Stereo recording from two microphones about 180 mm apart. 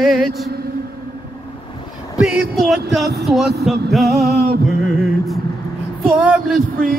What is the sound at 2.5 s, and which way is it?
Music, centre (ahead or behind).